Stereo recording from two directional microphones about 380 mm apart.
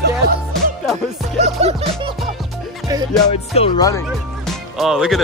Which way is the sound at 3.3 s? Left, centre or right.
Centre.